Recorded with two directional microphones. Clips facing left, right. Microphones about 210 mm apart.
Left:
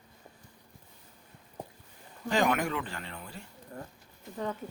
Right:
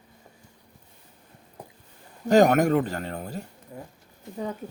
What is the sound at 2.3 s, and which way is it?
Speech, 45° right (ahead or behind).